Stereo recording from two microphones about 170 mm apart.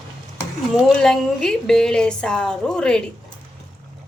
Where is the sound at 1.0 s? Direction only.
5° left (ahead or behind).